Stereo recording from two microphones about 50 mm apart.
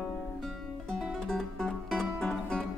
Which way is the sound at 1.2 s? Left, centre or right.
Centre.